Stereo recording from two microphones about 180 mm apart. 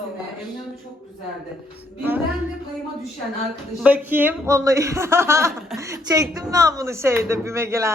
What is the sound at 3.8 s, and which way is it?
A woman's voice, 10° right (ahead or behind).